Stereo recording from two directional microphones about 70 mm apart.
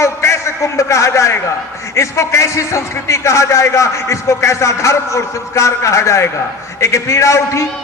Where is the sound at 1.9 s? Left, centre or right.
Left.